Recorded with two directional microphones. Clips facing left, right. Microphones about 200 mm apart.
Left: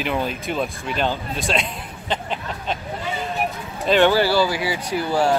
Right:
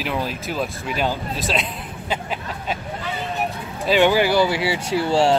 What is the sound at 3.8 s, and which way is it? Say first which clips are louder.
Speech: even; 10° right (ahead or behind).